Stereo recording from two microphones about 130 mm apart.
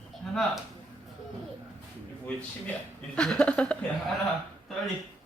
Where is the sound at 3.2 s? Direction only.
5° left (ahead or behind).